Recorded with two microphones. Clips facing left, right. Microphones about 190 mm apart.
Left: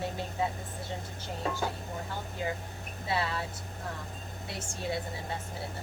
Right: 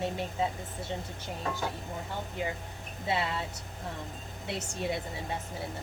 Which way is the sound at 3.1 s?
20° right (ahead or behind).